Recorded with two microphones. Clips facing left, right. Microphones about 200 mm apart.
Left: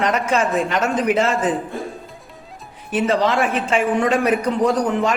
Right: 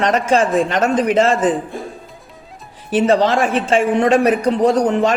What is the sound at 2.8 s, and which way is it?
Speech, 30° right (ahead or behind).